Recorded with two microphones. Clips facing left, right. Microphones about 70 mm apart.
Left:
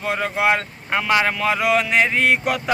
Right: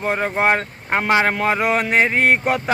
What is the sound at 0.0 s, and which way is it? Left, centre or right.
Speech, right.